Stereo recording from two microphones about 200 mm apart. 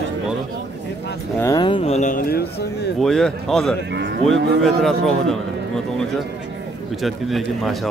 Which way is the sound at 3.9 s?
60° right (ahead or behind).